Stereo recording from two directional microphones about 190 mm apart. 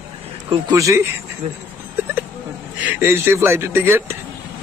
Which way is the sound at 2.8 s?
10° right (ahead or behind).